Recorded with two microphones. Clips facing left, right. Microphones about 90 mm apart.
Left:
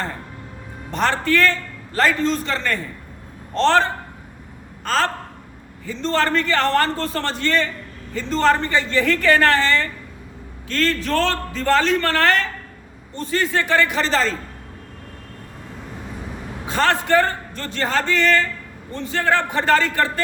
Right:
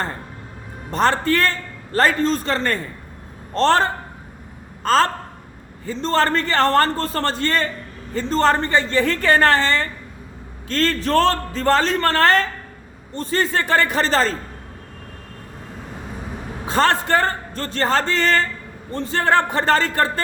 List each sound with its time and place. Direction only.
0.9 s a man's voice: 40° right (ahead or behind)
16.6 s a man's voice: 35° right (ahead or behind)